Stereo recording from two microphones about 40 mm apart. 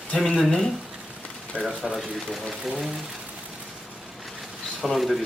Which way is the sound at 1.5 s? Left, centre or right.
Left.